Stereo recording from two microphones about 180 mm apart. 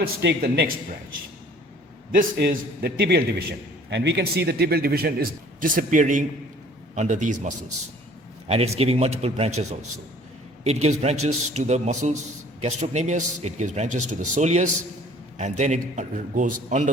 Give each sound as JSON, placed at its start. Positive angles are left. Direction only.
{"t": 0.0, "sound": "a man's voice", "side_deg": -65}
{"t": 2.1, "sound": "a man's voice", "side_deg": -55}
{"t": 3.8, "sound": "a man's voice", "side_deg": -75}